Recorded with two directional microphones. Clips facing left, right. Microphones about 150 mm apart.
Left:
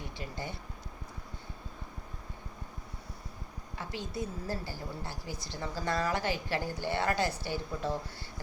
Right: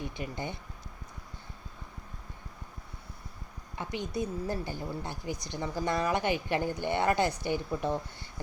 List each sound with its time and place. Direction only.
0.0 s a woman's voice: 20° right (ahead or behind)
3.8 s a woman's voice: 20° right (ahead or behind)